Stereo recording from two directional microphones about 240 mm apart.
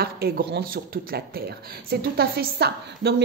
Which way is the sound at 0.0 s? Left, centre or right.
Right.